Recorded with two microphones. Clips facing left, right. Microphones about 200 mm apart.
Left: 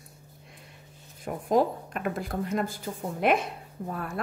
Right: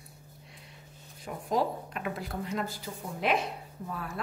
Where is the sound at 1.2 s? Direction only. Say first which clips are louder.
Left 5 dB; 50° left (ahead or behind).